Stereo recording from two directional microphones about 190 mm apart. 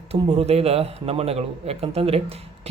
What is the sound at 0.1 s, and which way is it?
A man's voice, 35° right (ahead or behind).